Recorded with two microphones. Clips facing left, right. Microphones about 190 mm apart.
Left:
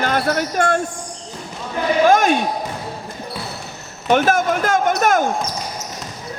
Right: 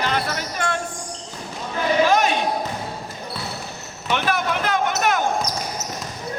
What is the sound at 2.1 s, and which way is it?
Basketball bounce, 50° left (ahead or behind).